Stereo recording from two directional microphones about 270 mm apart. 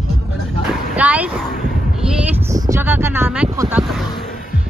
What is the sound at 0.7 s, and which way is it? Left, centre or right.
Speech, centre.